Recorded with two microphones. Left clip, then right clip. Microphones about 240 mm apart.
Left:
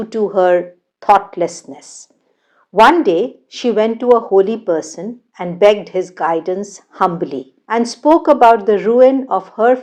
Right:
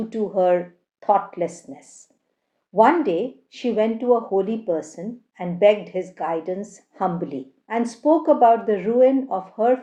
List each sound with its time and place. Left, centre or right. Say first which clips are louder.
0.3 s a woman's voice: left 6 dB; left
4.0 s speech: left 10 dB; left
4.4 s a woman's voice: left 9 dB; left